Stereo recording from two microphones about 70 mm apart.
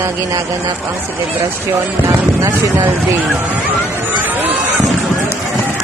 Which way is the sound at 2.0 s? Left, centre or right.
Right.